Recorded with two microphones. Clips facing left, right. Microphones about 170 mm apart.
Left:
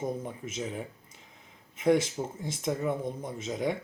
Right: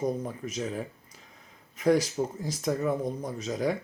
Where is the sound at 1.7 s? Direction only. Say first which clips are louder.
Right 1 dB; 25° left (ahead or behind).